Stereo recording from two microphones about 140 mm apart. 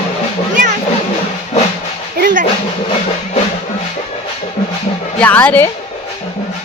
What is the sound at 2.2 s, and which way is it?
Speech, 70° right (ahead or behind).